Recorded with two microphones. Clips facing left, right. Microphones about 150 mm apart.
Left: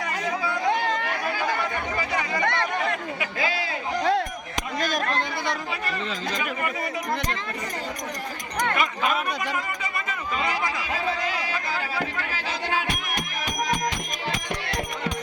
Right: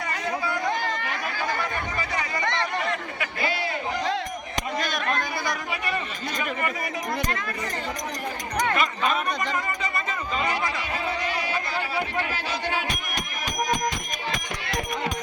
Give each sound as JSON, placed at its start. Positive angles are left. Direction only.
{"t": 2.0, "sound": "chatter", "side_deg": 20}
{"t": 2.4, "sound": "chatter", "side_deg": 55}
{"t": 3.3, "sound": "a man's voice", "side_deg": 90}
{"t": 4.8, "sound": "a sound", "side_deg": 45}
{"t": 9.0, "sound": "speech", "side_deg": 10}